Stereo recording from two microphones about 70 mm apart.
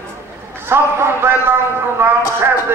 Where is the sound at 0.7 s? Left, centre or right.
Right.